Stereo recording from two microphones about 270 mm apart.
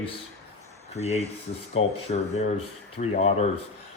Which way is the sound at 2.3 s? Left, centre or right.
Left.